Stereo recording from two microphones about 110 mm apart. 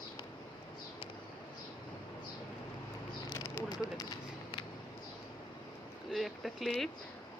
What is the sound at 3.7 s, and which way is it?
Speech, 35° left (ahead or behind).